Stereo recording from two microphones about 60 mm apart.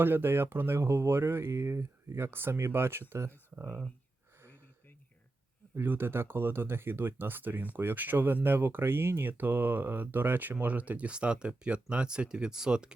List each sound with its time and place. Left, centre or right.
0.0 s speech: right
1.5 s speech: right
5.7 s speech: right; by 12.9 s centre